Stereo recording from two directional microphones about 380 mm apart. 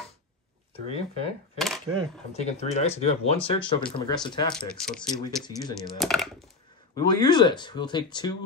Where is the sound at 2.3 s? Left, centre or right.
Centre.